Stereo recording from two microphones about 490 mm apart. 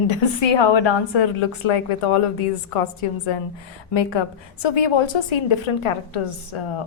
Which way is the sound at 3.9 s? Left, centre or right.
Left.